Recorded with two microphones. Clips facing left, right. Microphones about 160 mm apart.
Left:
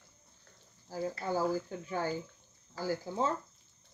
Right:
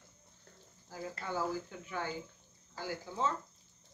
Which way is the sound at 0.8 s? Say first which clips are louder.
Left 6 dB; 35° left (ahead or behind).